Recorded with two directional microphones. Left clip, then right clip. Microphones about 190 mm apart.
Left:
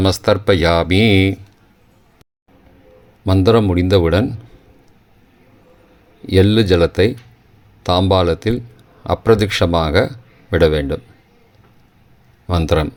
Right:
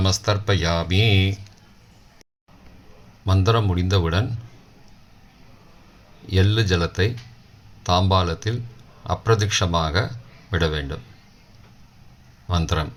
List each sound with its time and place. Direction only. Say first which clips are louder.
0.0 s speech: left 8 dB; 45° left (ahead or behind)
3.2 s a man's voice: left 9 dB; 40° left (ahead or behind)
6.2 s a man's voice: left 10 dB; 40° left (ahead or behind)
12.5 s speech: left 9 dB; 45° left (ahead or behind)